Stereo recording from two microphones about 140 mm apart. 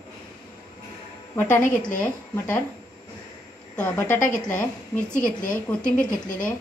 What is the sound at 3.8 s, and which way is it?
Speech, 15° left (ahead or behind).